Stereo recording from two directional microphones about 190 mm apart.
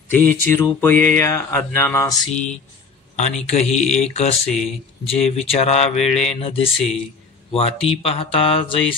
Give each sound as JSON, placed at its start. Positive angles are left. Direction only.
{"t": 0.1, "sound": "mantra", "side_deg": 10}
{"t": 3.2, "sound": "mantra", "side_deg": 35}
{"t": 4.5, "sound": "speech", "side_deg": 5}
{"t": 5.0, "sound": "mantra", "side_deg": 30}
{"t": 7.5, "sound": "speech", "side_deg": 30}